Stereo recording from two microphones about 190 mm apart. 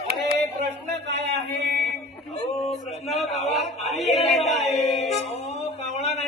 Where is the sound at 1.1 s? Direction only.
65° right (ahead or behind).